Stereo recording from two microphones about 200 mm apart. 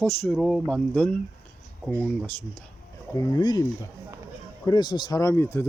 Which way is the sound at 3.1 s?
20° left (ahead or behind).